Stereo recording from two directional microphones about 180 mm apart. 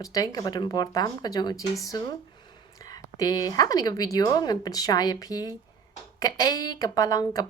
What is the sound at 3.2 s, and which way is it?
A woman's voice, 20° left (ahead or behind).